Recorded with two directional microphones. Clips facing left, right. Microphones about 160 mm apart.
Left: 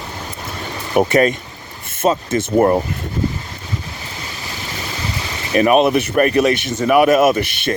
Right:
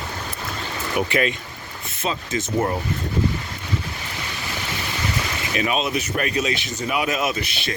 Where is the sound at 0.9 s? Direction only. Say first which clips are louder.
Left 8 dB; 40° left (ahead or behind); by 2.8 s 60° left (ahead or behind).